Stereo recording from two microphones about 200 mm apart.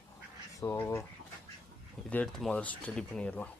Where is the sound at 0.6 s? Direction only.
15° left (ahead or behind).